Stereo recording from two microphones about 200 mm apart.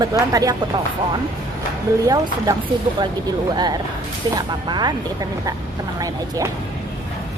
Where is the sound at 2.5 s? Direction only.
15° right (ahead or behind).